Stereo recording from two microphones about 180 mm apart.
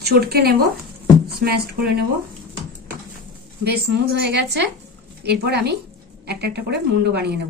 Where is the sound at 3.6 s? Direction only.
65° right (ahead or behind).